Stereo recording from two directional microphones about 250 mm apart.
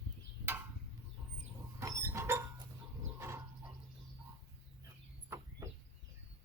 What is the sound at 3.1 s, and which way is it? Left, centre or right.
Bird, centre.